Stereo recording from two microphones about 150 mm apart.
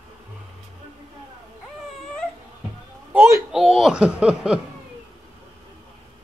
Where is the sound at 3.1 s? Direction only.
15° right (ahead or behind).